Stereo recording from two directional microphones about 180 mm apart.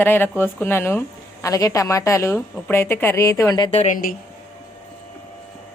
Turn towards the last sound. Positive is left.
turn(degrees=45)  # may be behind; listen again after turning